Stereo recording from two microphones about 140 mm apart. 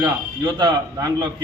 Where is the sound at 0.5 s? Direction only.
30° right (ahead or behind).